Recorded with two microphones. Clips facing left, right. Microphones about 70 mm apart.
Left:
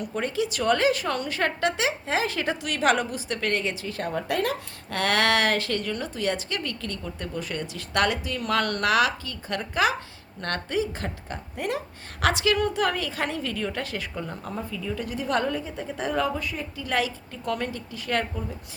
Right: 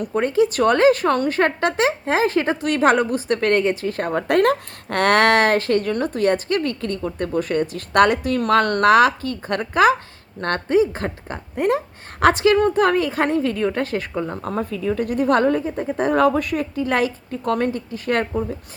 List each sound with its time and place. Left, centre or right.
0.0 s a woman's voice: right
14.5 s speech: right
16.8 s a woman's voice: right